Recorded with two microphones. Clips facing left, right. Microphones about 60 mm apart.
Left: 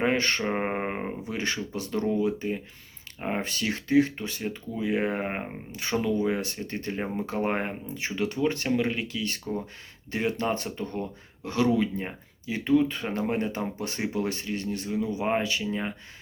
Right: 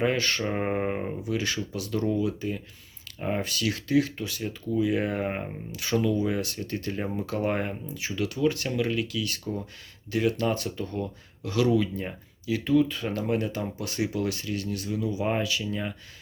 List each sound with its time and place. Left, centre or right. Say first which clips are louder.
0.0 s speech: left 1 dB; left